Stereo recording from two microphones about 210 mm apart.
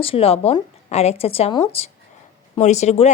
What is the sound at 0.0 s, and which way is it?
Speech, 25° left (ahead or behind).